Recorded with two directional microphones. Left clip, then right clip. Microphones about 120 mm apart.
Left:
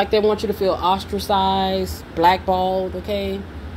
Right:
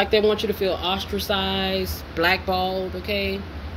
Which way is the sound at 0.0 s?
55° left (ahead or behind).